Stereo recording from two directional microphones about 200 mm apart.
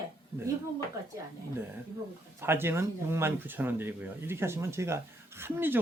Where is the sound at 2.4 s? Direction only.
10° right (ahead or behind).